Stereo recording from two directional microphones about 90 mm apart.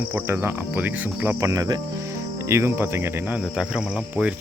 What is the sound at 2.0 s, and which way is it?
Cricket, 30° right (ahead or behind).